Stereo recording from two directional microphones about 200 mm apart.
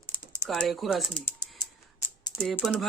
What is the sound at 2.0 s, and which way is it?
Typing, 15° left (ahead or behind).